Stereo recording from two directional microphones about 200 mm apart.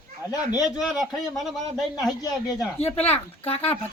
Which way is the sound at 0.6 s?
Centre (ahead or behind).